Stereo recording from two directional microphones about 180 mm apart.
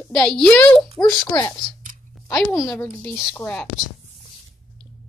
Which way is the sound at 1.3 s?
20° left (ahead or behind).